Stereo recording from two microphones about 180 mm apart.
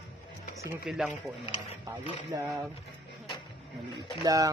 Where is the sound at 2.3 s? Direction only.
20° right (ahead or behind).